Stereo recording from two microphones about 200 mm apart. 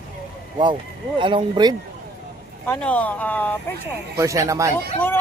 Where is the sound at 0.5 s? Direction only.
25° right (ahead or behind).